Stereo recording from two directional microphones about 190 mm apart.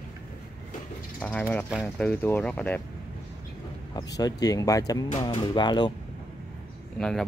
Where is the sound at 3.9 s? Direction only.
20° left (ahead or behind).